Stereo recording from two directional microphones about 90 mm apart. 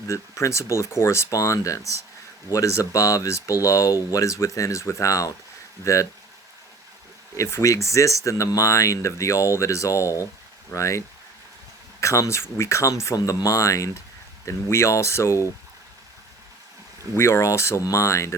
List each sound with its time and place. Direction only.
0.1 s speech: 35° left (ahead or behind)
7.3 s speech: 35° left (ahead or behind)
17.2 s speech: 30° left (ahead or behind)